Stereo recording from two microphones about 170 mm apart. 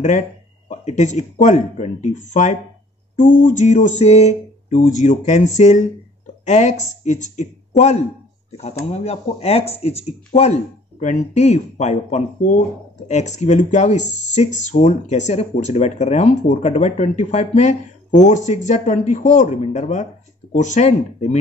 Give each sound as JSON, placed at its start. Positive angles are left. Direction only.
{"t": 0.7, "sound": "speech", "side_deg": 45}